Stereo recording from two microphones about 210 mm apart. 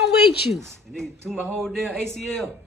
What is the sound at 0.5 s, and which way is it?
A man's voice, centre (ahead or behind).